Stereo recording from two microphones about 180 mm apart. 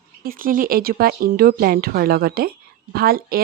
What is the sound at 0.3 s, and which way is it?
Speech, 50° right (ahead or behind).